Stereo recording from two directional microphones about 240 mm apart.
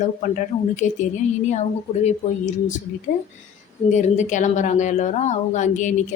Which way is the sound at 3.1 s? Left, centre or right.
Left.